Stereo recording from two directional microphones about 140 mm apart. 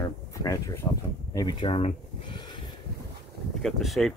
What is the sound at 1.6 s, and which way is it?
Speech, 40° left (ahead or behind).